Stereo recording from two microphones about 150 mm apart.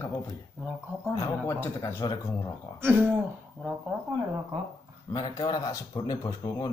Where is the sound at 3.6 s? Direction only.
10° right (ahead or behind).